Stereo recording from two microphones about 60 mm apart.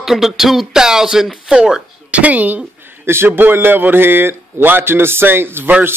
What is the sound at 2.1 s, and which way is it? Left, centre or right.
Speech, right.